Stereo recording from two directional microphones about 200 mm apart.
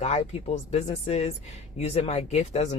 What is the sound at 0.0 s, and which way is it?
Speech, 30° left (ahead or behind).